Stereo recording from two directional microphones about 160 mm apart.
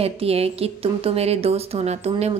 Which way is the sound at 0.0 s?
40° right (ahead or behind).